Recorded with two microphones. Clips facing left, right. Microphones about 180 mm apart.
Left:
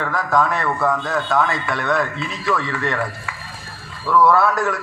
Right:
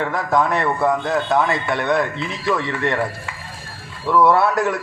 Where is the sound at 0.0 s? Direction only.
25° right (ahead or behind).